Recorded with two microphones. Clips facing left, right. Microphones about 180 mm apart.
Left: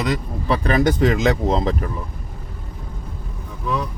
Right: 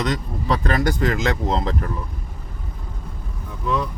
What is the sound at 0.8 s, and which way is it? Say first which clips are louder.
Speech: left 4 dB; 20° left (ahead or behind).